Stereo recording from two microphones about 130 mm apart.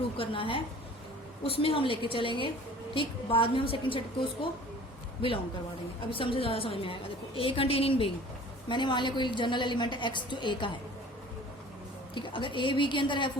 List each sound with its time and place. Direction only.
0.2 s a woman's voice: 40° left (ahead or behind)
6.1 s a woman's voice: 45° left (ahead or behind)
12.1 s a woman's voice: 40° left (ahead or behind)